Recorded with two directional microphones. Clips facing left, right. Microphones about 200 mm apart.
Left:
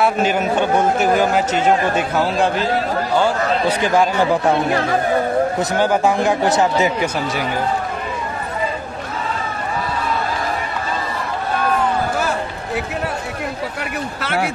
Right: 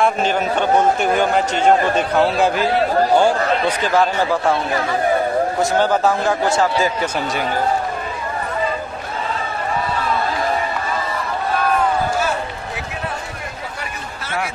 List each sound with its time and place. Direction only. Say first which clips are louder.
0.0 s speech: left 1 dB; 10° left (ahead or behind)
3.6 s speech: left 3 dB; 15° left (ahead or behind)
5.8 s speech: left 2 dB; 15° left (ahead or behind)